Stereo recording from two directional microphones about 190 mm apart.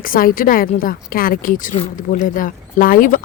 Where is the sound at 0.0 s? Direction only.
50° left (ahead or behind).